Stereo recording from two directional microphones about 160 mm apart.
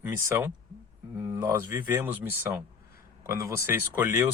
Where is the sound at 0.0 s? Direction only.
15° right (ahead or behind).